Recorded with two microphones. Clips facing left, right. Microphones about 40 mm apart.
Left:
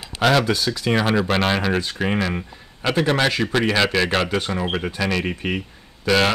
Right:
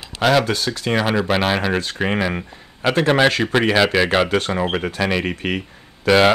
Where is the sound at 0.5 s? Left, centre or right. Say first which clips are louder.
Even; right.